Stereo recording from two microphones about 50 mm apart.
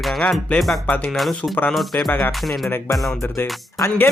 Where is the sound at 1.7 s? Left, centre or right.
Centre.